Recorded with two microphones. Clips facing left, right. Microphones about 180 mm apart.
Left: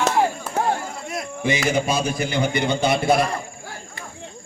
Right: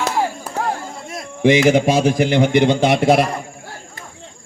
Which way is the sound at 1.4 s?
90° right.